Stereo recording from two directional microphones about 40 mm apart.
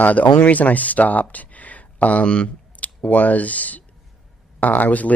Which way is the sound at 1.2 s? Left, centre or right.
Left.